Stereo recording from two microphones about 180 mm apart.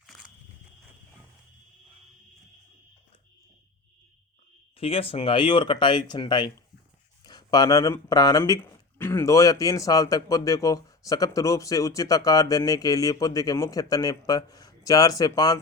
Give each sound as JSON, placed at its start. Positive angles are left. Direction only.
{"t": 4.8, "sound": "speech", "side_deg": 30}